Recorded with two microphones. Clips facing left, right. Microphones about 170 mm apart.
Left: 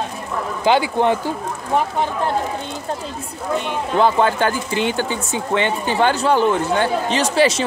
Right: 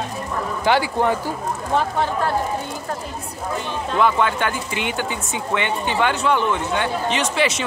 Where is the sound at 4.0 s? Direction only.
35° left (ahead or behind).